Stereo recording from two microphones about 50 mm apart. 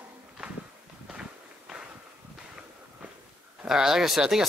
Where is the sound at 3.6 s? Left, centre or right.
Centre.